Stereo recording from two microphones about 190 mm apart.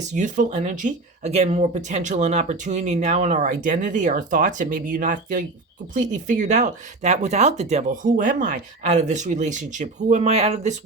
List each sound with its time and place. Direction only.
0.0 s speech: 40° right (ahead or behind)